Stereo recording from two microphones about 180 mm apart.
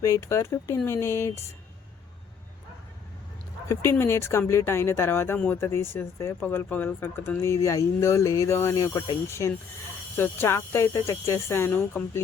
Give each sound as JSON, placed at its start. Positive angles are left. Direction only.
{"t": 0.0, "sound": "speech", "side_deg": 15}
{"t": 3.7, "sound": "speech", "side_deg": 15}